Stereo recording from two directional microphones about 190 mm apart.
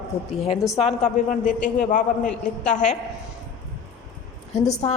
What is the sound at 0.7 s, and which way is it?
A man's voice, 35° left (ahead or behind).